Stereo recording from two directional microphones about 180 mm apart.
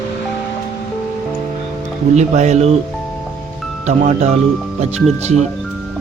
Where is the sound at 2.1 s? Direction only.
40° right (ahead or behind).